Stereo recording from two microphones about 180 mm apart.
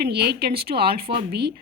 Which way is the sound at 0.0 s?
60° right (ahead or behind).